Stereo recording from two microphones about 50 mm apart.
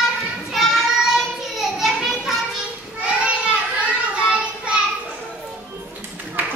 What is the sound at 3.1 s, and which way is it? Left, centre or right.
Child singing, right.